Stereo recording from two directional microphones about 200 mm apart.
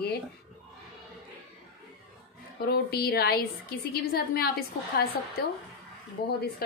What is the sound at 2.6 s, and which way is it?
A woman's voice, 50° left (ahead or behind).